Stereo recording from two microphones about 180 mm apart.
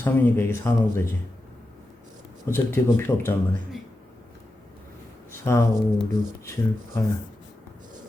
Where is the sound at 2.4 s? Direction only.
15° left (ahead or behind).